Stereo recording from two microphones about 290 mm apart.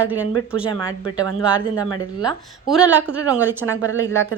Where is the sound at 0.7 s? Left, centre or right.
Centre.